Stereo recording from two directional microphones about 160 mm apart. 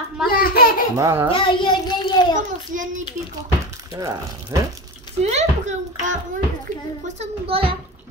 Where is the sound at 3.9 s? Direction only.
20° right (ahead or behind).